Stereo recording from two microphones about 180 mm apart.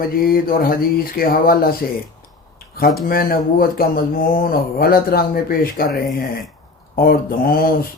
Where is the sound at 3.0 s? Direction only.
55° left (ahead or behind).